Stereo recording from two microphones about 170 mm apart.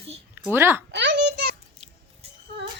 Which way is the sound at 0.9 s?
90° right.